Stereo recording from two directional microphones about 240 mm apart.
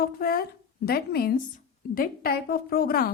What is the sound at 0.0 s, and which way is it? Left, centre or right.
A woman's voice, left.